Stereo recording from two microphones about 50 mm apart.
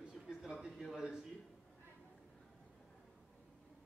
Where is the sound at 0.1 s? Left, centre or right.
Centre.